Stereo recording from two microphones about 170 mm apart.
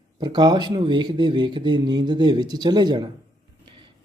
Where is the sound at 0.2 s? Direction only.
25° right (ahead or behind).